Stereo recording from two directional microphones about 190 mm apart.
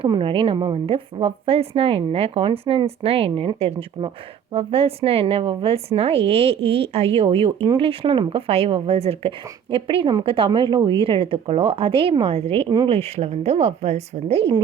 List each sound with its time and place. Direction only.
0.0 s a woman's voice: 25° right (ahead or behind)